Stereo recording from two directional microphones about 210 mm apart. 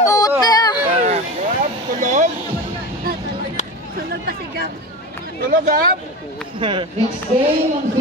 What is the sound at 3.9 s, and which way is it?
Hubbub, 45° right (ahead or behind).